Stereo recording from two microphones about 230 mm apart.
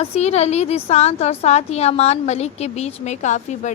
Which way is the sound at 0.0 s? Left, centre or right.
Left.